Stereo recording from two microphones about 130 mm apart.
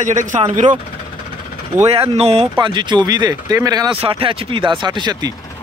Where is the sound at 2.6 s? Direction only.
35° right (ahead or behind).